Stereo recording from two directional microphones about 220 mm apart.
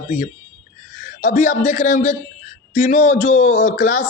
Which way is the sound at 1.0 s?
35° left (ahead or behind).